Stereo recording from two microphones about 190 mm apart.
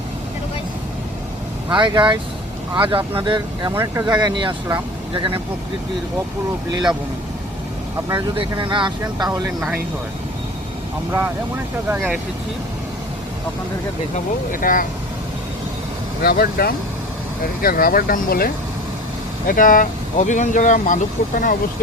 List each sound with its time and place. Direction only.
1.7 s speech: 25° right (ahead or behind)
8.1 s speech: 25° right (ahead or behind)
11.9 s speech: 10° right (ahead or behind)
14.5 s speech: 45° left (ahead or behind)
16.2 s speech: 55° left (ahead or behind)